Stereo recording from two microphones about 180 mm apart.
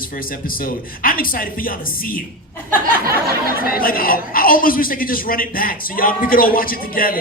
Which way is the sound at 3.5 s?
55° left (ahead or behind).